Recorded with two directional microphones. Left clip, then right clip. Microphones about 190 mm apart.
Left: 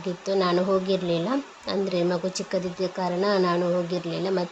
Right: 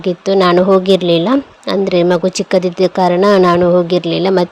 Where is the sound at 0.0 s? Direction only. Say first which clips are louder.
Right 13 dB; 45° right (ahead or behind).